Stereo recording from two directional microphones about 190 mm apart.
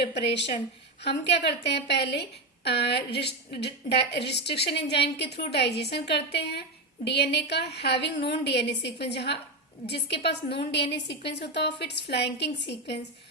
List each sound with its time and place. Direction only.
0.0 s a woman's voice: 60° left (ahead or behind)